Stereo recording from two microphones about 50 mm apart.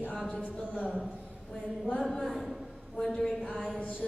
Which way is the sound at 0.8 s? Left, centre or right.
Centre.